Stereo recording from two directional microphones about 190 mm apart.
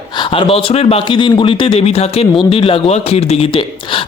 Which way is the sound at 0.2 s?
30° left (ahead or behind).